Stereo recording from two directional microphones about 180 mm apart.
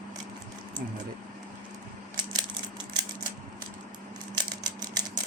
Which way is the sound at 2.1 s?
25° right (ahead or behind).